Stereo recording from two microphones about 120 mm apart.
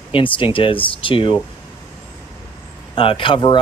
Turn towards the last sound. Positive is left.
turn(degrees=45)  # may be behind; listen again after turning